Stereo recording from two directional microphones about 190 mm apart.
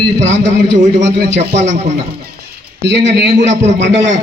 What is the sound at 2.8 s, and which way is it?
A man's voice, 65° right (ahead or behind).